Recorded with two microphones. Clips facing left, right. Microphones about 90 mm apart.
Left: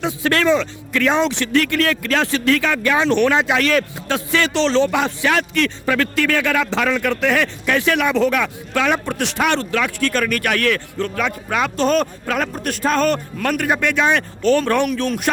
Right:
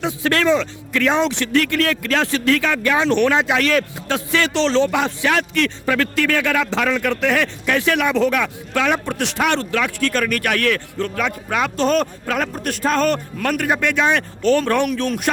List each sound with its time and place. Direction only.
0.0 s a man's voice: 20° left (ahead or behind)